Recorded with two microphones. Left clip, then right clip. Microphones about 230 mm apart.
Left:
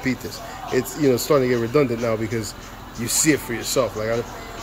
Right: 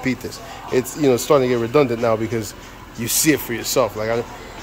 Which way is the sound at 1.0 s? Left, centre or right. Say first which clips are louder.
Right 3 dB; right.